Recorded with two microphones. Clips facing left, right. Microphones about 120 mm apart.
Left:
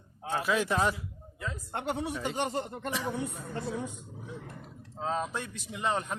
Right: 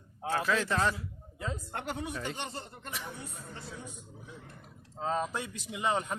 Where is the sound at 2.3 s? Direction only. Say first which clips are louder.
Left 8 dB; 40° left (ahead or behind).